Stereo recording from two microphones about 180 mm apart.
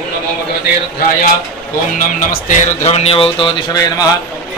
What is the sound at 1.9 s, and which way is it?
A man's voice, 45° left (ahead or behind).